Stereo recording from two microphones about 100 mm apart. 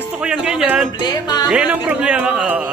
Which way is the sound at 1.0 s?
45° left (ahead or behind).